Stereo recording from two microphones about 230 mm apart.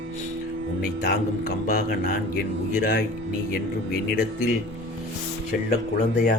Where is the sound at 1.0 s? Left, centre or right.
Left.